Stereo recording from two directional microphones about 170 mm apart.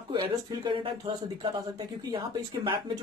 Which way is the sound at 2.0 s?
25° right (ahead or behind).